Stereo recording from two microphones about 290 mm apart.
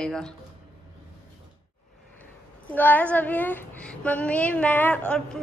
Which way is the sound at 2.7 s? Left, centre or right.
Centre.